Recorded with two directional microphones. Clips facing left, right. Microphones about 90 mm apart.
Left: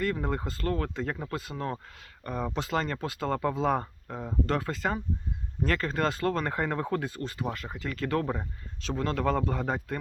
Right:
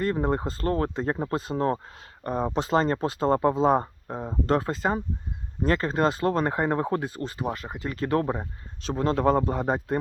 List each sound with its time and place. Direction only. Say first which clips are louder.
0.0 s speech: right 5 dB; 30° right (ahead or behind)
2.2 s speech: right 6 dB; 25° right (ahead or behind)